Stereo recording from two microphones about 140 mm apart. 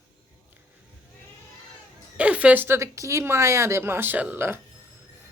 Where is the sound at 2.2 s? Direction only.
10° right (ahead or behind).